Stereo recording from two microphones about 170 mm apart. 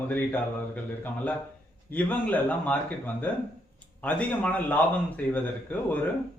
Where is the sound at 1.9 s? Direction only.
10° left (ahead or behind).